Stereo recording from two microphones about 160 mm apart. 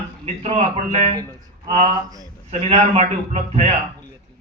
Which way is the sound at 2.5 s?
40° right (ahead or behind).